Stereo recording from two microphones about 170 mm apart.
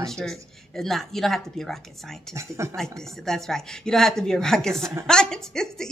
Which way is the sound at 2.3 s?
15° right (ahead or behind).